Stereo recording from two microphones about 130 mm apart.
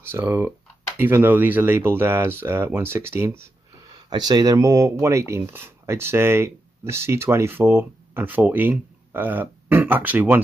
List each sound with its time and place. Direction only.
0.0 s speech: 15° right (ahead or behind)
4.1 s speech: 30° right (ahead or behind); by 10.4 s 15° right (ahead or behind)